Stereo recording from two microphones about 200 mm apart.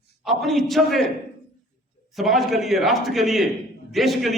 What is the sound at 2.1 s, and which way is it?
A man's voice, centre (ahead or behind).